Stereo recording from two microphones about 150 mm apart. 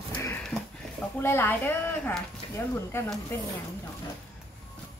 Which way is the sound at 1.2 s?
15° left (ahead or behind).